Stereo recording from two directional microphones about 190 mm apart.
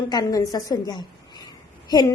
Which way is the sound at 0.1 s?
20° left (ahead or behind).